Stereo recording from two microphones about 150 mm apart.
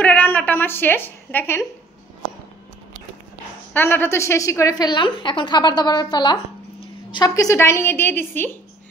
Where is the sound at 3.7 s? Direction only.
15° left (ahead or behind).